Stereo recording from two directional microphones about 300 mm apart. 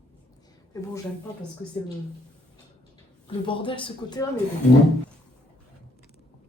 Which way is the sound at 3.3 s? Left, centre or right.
Centre.